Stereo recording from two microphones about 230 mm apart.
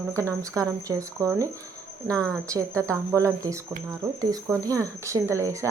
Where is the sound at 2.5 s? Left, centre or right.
Centre.